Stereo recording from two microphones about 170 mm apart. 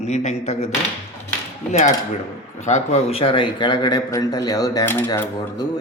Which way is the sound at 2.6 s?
40° left (ahead or behind).